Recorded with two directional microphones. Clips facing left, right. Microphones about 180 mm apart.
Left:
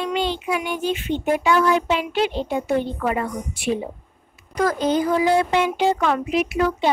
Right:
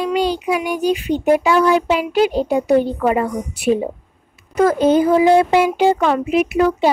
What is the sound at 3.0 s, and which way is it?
Speech, 20° right (ahead or behind).